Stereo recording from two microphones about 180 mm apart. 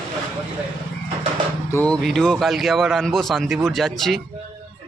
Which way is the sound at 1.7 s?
10° left (ahead or behind).